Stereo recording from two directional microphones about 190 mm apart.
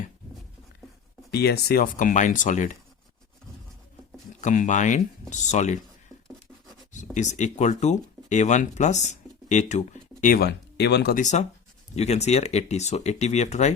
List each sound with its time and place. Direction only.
1.3 s speech: 60° left (ahead or behind); by 2.7 s 40° left (ahead or behind)
4.4 s speech: 40° left (ahead or behind)
6.9 s speech: 40° left (ahead or behind); by 11.2 s 60° left (ahead or behind)
11.2 s speech: 40° left (ahead or behind)